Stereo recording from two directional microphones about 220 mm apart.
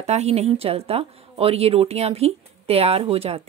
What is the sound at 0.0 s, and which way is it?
Speech, 30° right (ahead or behind).